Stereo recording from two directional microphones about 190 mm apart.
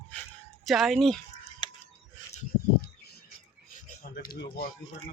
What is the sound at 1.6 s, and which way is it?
Scissors, 25° left (ahead or behind).